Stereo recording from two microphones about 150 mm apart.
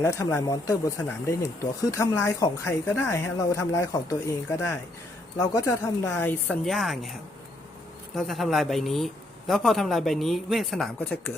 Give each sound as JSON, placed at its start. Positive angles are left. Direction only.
{"t": 0.0, "sound": "speech", "side_deg": 15}
{"t": 6.7, "sound": "speech", "side_deg": 0}
{"t": 8.1, "sound": "speech", "side_deg": 0}